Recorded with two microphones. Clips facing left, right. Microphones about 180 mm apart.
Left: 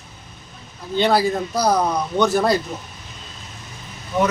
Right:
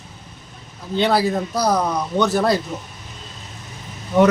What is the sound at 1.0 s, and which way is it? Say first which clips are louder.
Speech: even; centre (ahead or behind).